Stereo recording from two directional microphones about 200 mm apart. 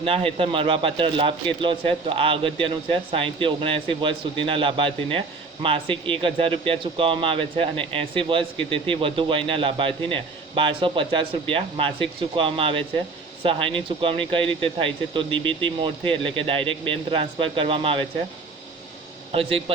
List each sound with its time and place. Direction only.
0.0 s speech: 30° right (ahead or behind)
19.3 s speech: 30° right (ahead or behind)